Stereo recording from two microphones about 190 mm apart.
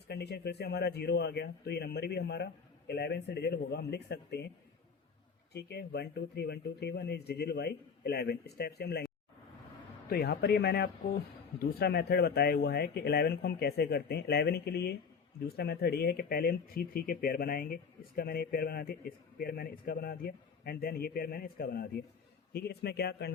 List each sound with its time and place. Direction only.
0.1 s speech: 60° left (ahead or behind)
5.5 s speech: 60° left (ahead or behind)
10.1 s speech: 55° left (ahead or behind)